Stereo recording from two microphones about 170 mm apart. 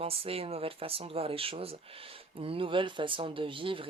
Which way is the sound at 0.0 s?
35° right (ahead or behind).